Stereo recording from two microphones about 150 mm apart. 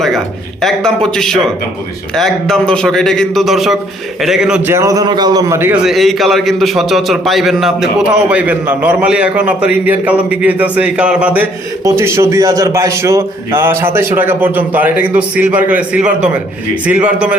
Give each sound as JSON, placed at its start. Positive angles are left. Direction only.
{"t": 0.6, "sound": "a man's voice", "side_deg": 5}
{"t": 4.7, "sound": "a man's voice", "side_deg": -20}
{"t": 5.8, "sound": "a man's voice", "side_deg": 0}